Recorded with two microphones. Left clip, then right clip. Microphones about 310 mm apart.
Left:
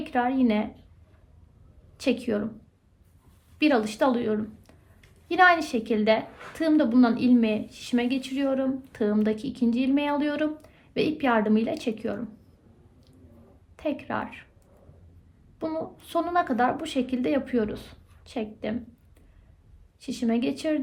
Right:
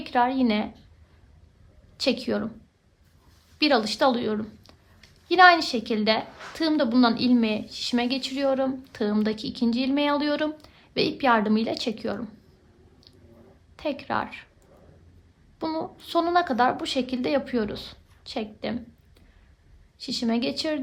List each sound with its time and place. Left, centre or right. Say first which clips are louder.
0.0 s a woman's voice: right 2 dB; centre
2.0 s a woman's voice: right 1 dB; centre
3.6 s a woman's voice: right 2 dB; centre
13.7 s a woman's voice: right 2 dB; centre
15.5 s a woman's voice: right 1 dB; centre
20.1 s a woman's voice: right 1 dB; centre